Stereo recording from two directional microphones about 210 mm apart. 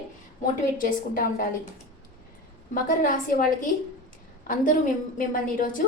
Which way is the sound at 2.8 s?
40° left (ahead or behind).